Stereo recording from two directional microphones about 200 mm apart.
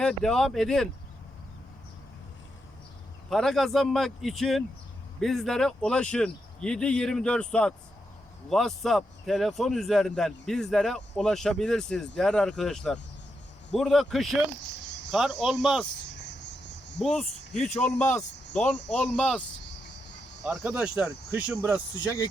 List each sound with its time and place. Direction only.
0.0 s a man's voice: centre (ahead or behind)
3.2 s a man's voice: centre (ahead or behind)
17.0 s a man's voice: centre (ahead or behind)
17.5 s a man's voice: 35° left (ahead or behind)
17.7 s speech: 10° left (ahead or behind)
20.4 s speech: 10° right (ahead or behind)